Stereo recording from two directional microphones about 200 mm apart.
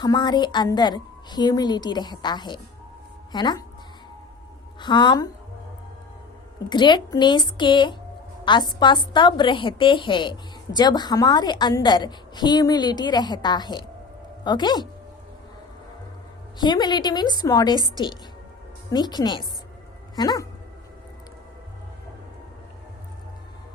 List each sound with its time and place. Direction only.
0.0 s a woman's voice: 20° left (ahead or behind)
4.8 s a woman's voice: 20° left (ahead or behind)
6.7 s a woman's voice: 20° left (ahead or behind)
16.6 s a woman's voice: 20° left (ahead or behind)